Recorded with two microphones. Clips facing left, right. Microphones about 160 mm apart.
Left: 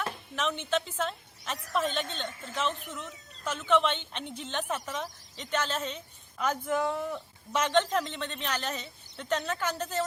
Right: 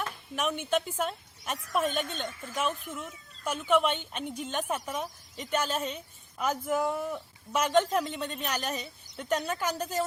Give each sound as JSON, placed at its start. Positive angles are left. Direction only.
{"t": 0.3, "sound": "a woman's voice", "side_deg": -10}